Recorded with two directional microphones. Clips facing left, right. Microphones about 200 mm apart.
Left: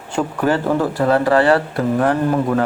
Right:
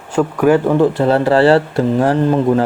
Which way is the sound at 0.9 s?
25° right (ahead or behind).